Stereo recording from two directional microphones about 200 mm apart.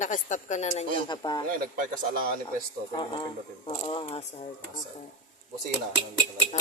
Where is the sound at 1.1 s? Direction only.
20° left (ahead or behind).